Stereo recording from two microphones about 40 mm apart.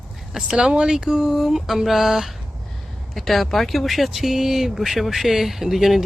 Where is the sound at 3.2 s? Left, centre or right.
Centre.